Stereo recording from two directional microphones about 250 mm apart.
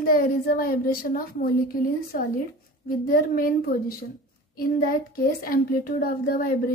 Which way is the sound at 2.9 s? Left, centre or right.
Left.